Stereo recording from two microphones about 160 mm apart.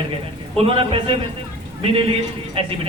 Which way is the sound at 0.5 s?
35° right (ahead or behind).